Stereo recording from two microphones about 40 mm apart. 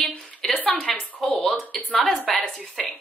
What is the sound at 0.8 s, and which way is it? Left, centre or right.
Speech, left.